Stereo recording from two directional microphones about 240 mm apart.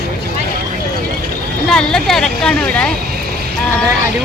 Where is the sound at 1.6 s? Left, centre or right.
Centre.